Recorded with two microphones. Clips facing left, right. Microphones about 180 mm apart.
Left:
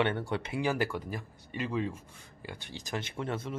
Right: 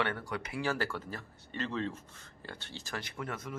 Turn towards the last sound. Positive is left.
turn(degrees=30)  # may be behind; listen again after turning